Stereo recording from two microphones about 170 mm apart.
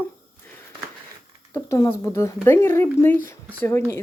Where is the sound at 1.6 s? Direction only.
15° left (ahead or behind).